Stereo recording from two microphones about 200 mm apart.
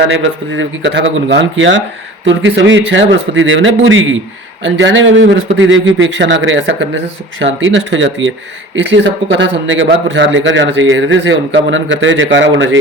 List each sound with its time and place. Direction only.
0.1 s a man's voice: 70° right (ahead or behind)